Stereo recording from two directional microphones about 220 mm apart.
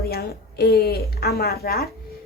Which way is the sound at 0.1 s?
45° left (ahead or behind).